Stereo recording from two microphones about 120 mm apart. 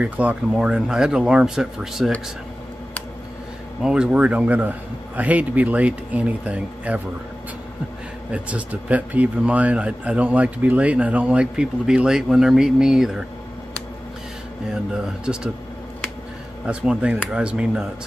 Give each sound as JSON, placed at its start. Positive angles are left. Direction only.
{"t": 0.0, "sound": "speech", "side_deg": -10}
{"t": 3.8, "sound": "speech", "side_deg": -5}
{"t": 8.3, "sound": "speech", "side_deg": -10}
{"t": 15.3, "sound": "speech", "side_deg": -5}
{"t": 16.6, "sound": "speech", "side_deg": -10}